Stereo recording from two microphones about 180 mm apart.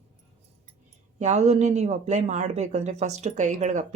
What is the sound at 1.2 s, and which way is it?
A woman's voice, 40° right (ahead or behind).